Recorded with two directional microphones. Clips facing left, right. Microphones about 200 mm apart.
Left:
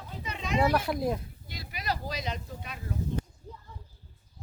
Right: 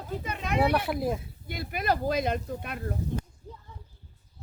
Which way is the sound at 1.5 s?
55° right (ahead or behind).